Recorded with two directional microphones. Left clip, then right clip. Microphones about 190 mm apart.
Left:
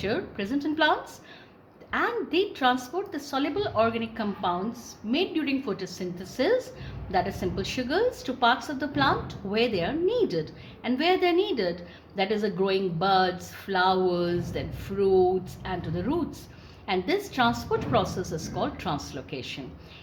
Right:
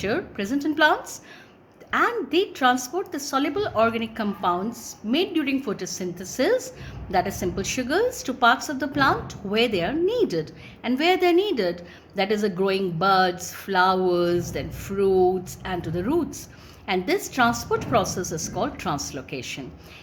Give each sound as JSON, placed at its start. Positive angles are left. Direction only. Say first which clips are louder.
{"t": 0.0, "sound": "a woman's voice", "louder": "right 3 dB", "side_deg": -25}